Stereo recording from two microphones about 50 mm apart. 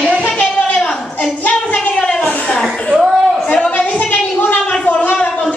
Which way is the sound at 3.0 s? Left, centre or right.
Centre.